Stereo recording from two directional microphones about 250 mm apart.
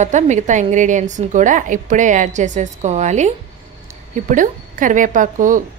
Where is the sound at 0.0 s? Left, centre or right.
Right.